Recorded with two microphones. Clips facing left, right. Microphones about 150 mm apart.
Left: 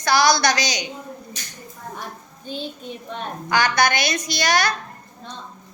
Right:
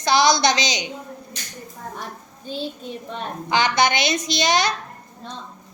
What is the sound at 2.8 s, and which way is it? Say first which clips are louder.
Speech: right 1 dB; centre (ahead or behind).